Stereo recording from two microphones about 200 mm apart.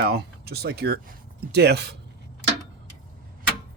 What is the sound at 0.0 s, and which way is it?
Speech, 50° right (ahead or behind).